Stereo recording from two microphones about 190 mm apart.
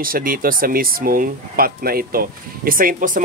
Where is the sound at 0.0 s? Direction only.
50° right (ahead or behind).